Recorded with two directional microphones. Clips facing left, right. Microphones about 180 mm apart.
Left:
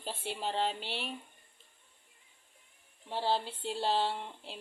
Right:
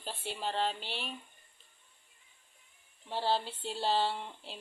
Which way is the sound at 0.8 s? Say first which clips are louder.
Left 2 dB; 65° left (ahead or behind).